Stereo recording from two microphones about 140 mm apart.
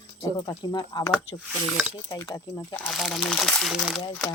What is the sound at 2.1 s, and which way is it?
Speech, 25° left (ahead or behind).